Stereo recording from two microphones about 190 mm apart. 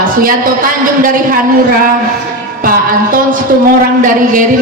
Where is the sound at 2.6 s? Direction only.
45° right (ahead or behind).